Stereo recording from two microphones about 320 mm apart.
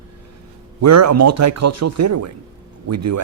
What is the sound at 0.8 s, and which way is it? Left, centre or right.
Speech, right.